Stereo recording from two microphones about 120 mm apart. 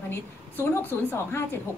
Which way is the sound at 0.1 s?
20° left (ahead or behind).